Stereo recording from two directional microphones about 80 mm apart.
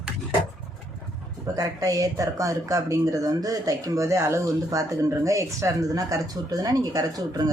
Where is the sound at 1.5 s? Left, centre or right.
Right.